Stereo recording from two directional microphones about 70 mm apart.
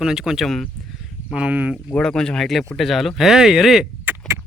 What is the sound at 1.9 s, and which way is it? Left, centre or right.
Speech, centre.